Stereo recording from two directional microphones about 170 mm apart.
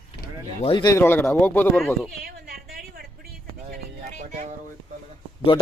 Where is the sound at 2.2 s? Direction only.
60° right (ahead or behind).